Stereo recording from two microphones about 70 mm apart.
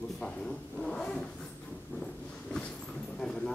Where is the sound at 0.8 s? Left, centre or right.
Centre.